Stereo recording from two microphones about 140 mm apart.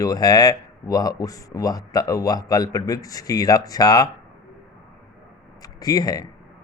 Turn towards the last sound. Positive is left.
turn(degrees=25)  # may be behind; listen again after turning